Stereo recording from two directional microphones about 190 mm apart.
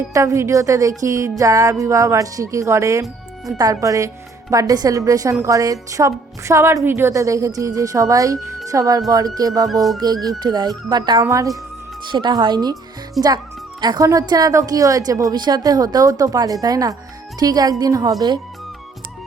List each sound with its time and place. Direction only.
0.1 s a woman's voice: 15° right (ahead or behind)
13.2 s speech: centre (ahead or behind)
13.8 s a woman's voice: 20° right (ahead or behind)